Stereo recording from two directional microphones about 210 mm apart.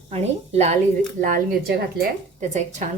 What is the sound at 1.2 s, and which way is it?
Speech, 45° right (ahead or behind).